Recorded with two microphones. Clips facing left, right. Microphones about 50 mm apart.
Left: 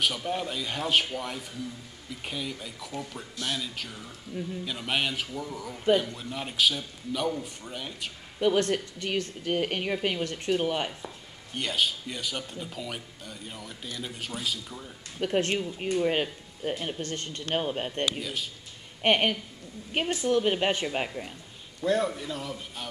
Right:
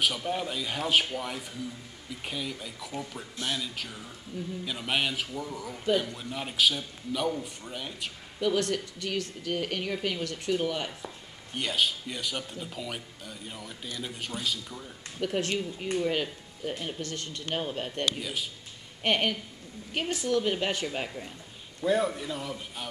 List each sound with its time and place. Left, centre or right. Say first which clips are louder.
0.0 s speech: even; centre
8.4 s speech: left 3 dB; left
11.5 s speech: even; centre
15.1 s speech: left 3 dB; left
17.6 s a woman's voice: left 3 dB; left
18.2 s speech: even; centre
19.0 s a woman's voice: left 3 dB; left
21.8 s speech: even; centre